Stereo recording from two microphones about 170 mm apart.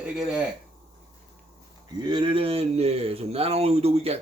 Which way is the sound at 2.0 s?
30° right (ahead or behind).